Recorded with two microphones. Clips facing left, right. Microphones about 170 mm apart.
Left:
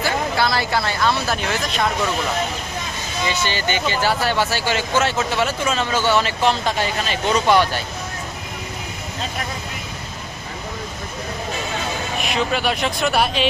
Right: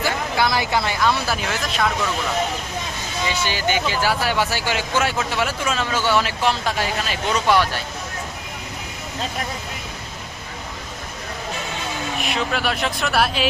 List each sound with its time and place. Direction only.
0.0 s speech: 15° right (ahead or behind)
3.2 s speech: 10° right (ahead or behind)
12.3 s speech: centre (ahead or behind)